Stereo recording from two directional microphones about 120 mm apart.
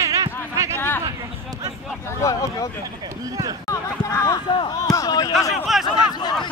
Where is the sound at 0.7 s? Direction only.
15° left (ahead or behind).